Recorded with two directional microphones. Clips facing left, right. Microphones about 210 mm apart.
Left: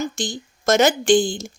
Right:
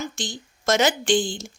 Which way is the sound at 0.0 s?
45° left (ahead or behind).